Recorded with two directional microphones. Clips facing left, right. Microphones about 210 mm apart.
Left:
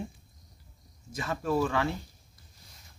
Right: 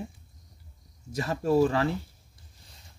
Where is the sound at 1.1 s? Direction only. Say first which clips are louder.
Right 5 dB; 35° right (ahead or behind).